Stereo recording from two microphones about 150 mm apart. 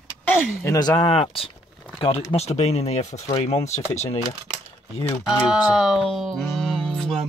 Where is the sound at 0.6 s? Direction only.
20° left (ahead or behind); by 4.2 s 45° left (ahead or behind).